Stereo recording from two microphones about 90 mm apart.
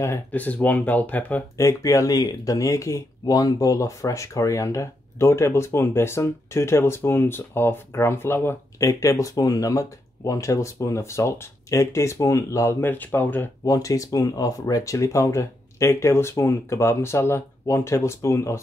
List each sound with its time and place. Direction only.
0.3 s speech: 15° left (ahead or behind)
1.6 s speech: 35° left (ahead or behind)
8.7 s speech: 40° left (ahead or behind)
12.9 s speech: 20° left (ahead or behind)
13.7 s speech: 40° left (ahead or behind)